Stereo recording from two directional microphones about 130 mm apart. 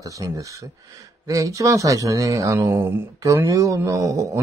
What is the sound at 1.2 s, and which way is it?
Speech, 25° right (ahead or behind).